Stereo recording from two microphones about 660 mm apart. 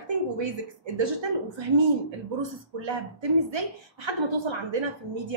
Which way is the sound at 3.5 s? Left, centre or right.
Right.